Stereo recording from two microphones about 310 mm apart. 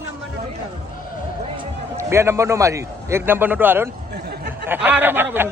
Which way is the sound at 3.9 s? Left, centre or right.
Right.